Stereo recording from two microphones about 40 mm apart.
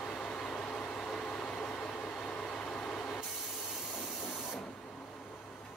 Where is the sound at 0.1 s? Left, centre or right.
Centre.